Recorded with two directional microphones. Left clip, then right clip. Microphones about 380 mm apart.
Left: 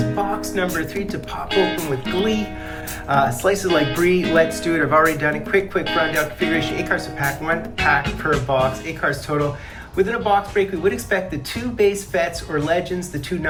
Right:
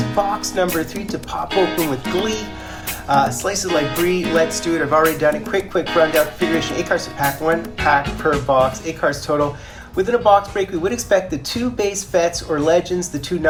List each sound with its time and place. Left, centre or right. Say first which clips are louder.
0.0 s speech: right 3 dB; centre